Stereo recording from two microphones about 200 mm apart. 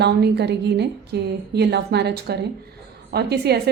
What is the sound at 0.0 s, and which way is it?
A woman's voice, 55° right (ahead or behind).